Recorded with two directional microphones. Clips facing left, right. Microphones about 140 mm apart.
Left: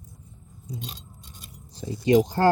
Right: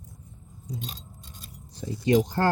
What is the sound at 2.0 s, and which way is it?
Speech, 20° left (ahead or behind).